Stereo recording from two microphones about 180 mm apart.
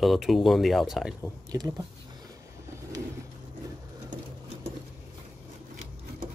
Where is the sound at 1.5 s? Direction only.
20° right (ahead or behind).